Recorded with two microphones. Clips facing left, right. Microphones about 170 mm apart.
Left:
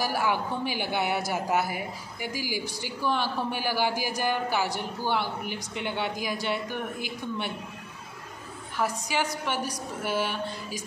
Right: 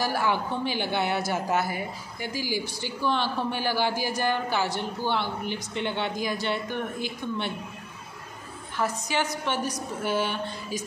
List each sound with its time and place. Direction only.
0.0 s a woman's voice: 10° left (ahead or behind)
8.7 s a woman's voice: 10° left (ahead or behind)